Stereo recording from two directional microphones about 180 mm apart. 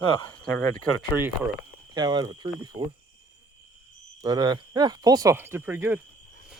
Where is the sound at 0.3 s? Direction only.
10° left (ahead or behind).